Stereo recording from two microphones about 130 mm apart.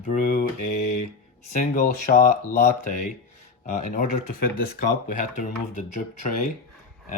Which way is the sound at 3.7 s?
90° left.